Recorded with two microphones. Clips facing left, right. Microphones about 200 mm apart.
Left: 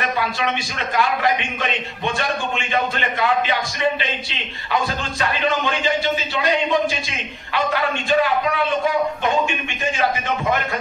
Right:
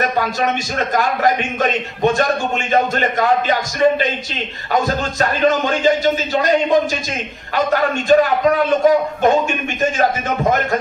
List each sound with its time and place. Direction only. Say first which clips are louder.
0.0 s a man's voice: right 4 dB; 45° right (ahead or behind)